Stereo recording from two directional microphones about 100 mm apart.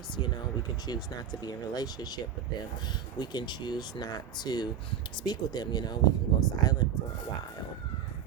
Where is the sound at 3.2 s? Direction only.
45° left (ahead or behind).